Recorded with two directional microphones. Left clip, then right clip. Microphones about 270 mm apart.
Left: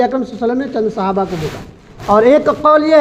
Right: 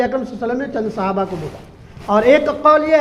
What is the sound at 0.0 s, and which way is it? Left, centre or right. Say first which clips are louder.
A woman's voice: left 4 dB; left.